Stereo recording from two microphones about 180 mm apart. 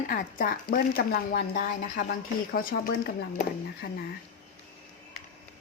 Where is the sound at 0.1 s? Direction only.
50° left (ahead or behind).